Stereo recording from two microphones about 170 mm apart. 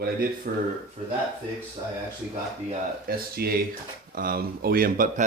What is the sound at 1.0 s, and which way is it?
Speech, 40° right (ahead or behind).